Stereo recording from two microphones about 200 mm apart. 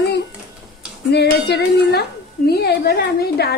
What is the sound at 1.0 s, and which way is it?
A woman's voice, 55° left (ahead or behind).